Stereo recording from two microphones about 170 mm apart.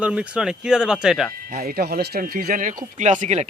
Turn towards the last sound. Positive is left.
turn(degrees=-45)  # may be behind; listen again after turning